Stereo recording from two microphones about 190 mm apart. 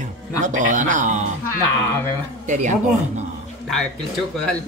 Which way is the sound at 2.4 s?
40° right (ahead or behind).